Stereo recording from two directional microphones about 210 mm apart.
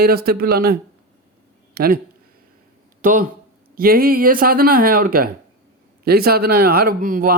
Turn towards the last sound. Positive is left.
turn(degrees=-40)  # may be behind; listen again after turning